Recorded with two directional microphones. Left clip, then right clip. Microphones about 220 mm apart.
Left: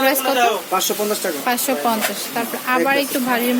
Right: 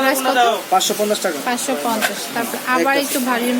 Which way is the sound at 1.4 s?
25° left (ahead or behind).